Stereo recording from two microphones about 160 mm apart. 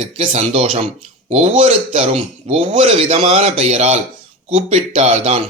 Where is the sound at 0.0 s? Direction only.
35° right (ahead or behind).